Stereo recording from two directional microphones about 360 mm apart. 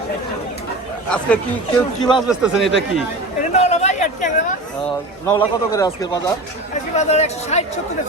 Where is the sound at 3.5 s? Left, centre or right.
Centre.